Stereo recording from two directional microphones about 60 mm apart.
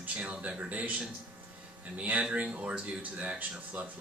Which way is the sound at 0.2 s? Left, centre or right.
Centre.